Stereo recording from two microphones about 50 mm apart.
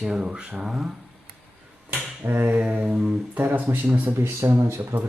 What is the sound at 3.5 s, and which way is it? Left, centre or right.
Speech, right.